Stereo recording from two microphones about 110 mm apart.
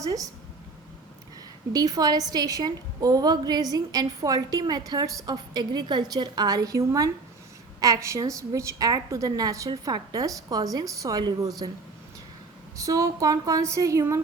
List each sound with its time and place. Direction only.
0.0 s a woman's voice: 30° right (ahead or behind)
1.7 s a woman's voice: 35° right (ahead or behind)
12.7 s a woman's voice: 30° right (ahead or behind)